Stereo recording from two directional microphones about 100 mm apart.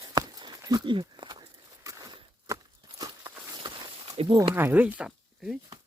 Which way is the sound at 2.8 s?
45° right (ahead or behind).